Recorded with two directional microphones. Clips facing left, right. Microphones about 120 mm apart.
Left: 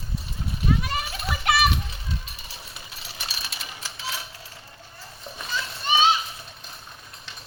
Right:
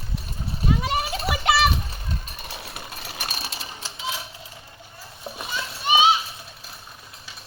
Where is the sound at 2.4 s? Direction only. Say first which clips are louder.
Right 6 dB; 65° right (ahead or behind); by 3.6 s 45° right (ahead or behind).